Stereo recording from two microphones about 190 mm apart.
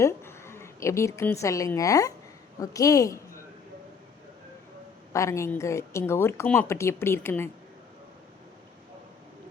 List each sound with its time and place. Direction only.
0.0 s a woman's voice: 15° left (ahead or behind)
5.1 s a woman's voice: 15° left (ahead or behind)